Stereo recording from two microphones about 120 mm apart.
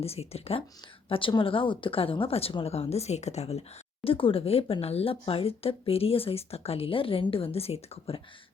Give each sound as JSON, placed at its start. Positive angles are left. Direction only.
{"t": 0.0, "sound": "a woman's voice", "side_deg": 55}
{"t": 4.0, "sound": "speech", "side_deg": 50}